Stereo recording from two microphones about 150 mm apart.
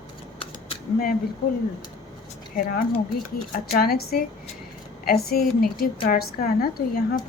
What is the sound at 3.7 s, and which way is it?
Speech, 90° left.